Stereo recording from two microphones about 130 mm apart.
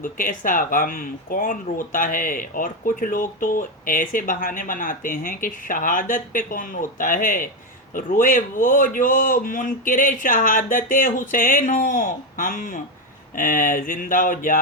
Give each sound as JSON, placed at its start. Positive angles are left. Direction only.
{"t": 0.0, "sound": "speech", "side_deg": 90}